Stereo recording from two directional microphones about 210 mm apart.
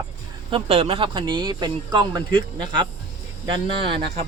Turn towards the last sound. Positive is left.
turn(degrees=-25)  # may be behind; listen again after turning